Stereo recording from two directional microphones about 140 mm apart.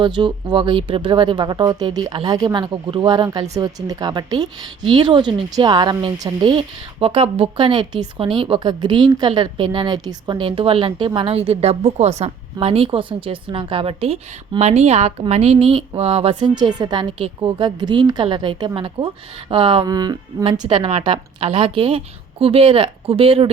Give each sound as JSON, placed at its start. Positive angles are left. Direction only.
{"t": 0.0, "sound": "a woman's voice", "side_deg": -35}
{"t": 19.9, "sound": "a woman's voice", "side_deg": -30}